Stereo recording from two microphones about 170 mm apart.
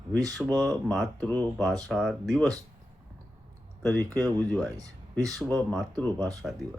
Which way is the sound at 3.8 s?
10° left (ahead or behind).